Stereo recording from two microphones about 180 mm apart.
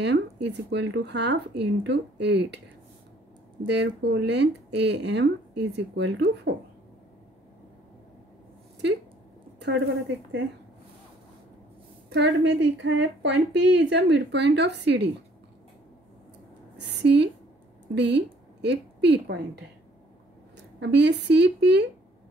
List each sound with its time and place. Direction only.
0.0 s speech: 70° right (ahead or behind)
3.6 s speech: 75° right (ahead or behind)
9.6 s a sound: 75° right (ahead or behind)
12.1 s speech: 75° right (ahead or behind)
16.9 s a woman's voice: 70° right (ahead or behind)
20.8 s speech: 70° right (ahead or behind)